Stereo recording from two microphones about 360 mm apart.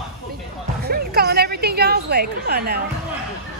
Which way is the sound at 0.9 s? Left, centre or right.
Right.